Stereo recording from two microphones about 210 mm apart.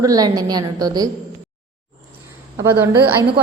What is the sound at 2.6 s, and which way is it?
Speech, 10° right (ahead or behind).